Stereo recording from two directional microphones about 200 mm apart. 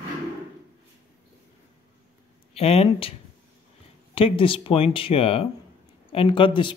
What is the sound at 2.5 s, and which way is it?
Speech, 30° left (ahead or behind).